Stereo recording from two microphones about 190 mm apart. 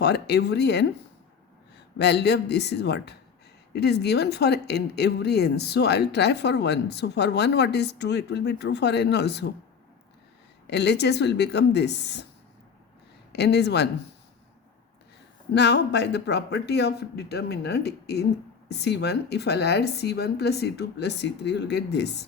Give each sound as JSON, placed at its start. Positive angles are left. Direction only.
{"t": 0.0, "sound": "speech", "side_deg": 60}
{"t": 2.0, "sound": "speech", "side_deg": 60}
{"t": 10.7, "sound": "speech", "side_deg": 60}
{"t": 13.3, "sound": "speech", "side_deg": 60}
{"t": 15.5, "sound": "speech", "side_deg": 65}